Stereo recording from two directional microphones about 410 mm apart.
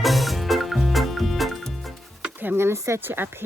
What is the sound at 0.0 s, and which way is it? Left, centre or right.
Music, centre.